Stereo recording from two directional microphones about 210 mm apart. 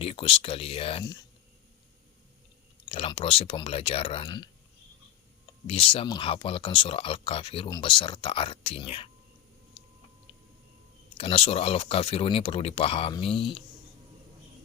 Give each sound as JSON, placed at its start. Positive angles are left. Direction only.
{"t": 0.0, "sound": "speech", "side_deg": 25}
{"t": 2.9, "sound": "speech", "side_deg": 25}
{"t": 5.6, "sound": "speech", "side_deg": 25}
{"t": 11.2, "sound": "speech", "side_deg": 25}